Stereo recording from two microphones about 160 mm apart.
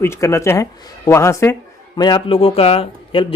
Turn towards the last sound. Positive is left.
turn(degrees=40)  # may be behind; listen again after turning